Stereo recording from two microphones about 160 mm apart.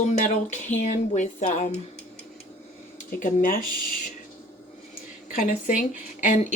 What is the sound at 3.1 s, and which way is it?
Speech, 55° left (ahead or behind).